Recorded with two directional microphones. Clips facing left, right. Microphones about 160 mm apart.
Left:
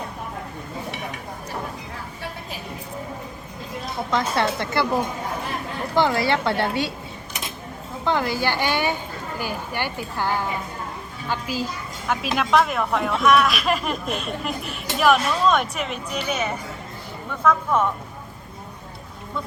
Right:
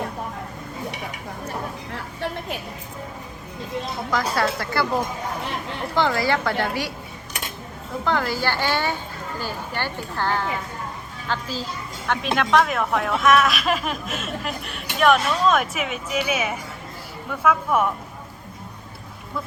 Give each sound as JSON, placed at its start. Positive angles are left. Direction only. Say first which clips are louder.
{"t": 4.1, "sound": "a woman's voice", "louder": "left 1 dB", "side_deg": 25}
{"t": 6.0, "sound": "a woman's voice", "louder": "left 1 dB", "side_deg": 25}
{"t": 8.0, "sound": "speech", "louder": "left 1 dB", "side_deg": 20}